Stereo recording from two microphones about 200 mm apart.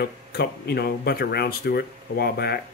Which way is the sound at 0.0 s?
50° left (ahead or behind).